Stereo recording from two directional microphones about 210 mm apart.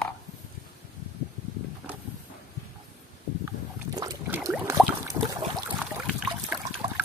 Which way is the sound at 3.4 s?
20° right (ahead or behind).